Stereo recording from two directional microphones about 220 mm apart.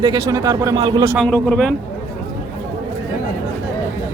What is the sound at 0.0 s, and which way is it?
Speech, 20° right (ahead or behind).